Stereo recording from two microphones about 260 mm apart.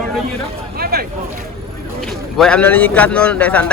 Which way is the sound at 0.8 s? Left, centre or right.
Right.